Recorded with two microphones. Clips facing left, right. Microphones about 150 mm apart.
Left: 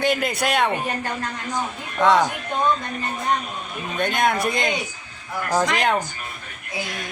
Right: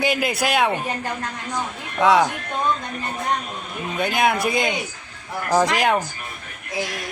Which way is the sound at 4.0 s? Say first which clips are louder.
Right 1 dB; 5° right (ahead or behind).